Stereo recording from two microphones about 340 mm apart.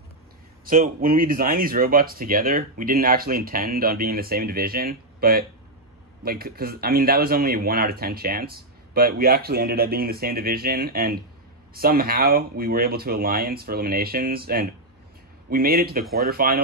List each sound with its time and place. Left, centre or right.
0.7 s speech: right